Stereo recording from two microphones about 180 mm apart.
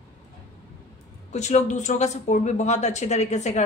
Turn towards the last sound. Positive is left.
turn(degrees=40)  # may be behind; listen again after turning